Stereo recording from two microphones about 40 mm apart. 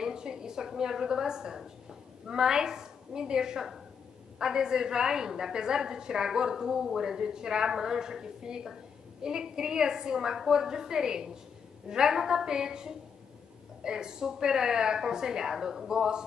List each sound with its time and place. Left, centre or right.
0.0 s a woman's voice: centre